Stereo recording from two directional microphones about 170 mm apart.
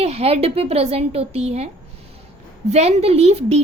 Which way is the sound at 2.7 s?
40° right (ahead or behind).